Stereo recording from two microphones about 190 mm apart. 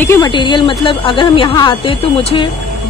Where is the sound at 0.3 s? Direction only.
25° left (ahead or behind).